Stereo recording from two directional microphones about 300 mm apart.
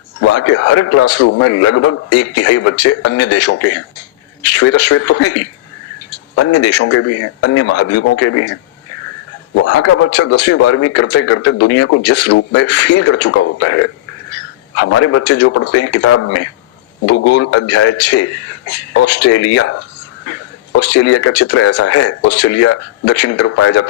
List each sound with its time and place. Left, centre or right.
0.2 s a man's voice: left
9.6 s a man's voice: left
20.7 s a man's voice: left